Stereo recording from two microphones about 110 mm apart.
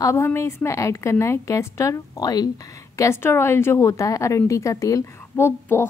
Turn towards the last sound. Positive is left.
turn(degrees=20)  # may be behind; listen again after turning